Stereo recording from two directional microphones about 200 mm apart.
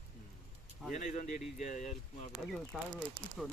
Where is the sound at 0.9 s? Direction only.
40° left (ahead or behind).